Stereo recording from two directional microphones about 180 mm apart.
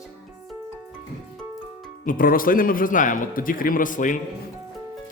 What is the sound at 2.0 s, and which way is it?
Speech, 50° left (ahead or behind).